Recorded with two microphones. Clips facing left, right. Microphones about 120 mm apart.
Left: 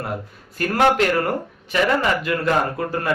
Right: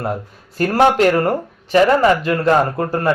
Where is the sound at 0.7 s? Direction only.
35° right (ahead or behind).